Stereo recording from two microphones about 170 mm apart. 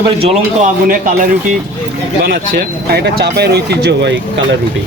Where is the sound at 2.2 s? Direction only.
70° right (ahead or behind).